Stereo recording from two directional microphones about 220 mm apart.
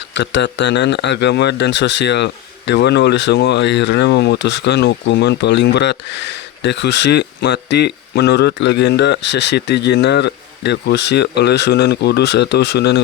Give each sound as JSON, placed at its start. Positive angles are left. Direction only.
{"t": 0.1, "sound": "speech", "side_deg": 55}